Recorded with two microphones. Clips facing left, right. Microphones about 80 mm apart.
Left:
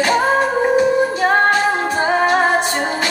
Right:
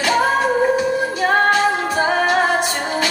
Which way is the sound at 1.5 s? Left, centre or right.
Left.